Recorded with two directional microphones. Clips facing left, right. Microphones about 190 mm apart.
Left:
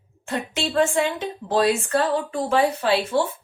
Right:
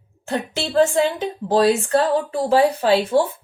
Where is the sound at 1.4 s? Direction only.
30° right (ahead or behind).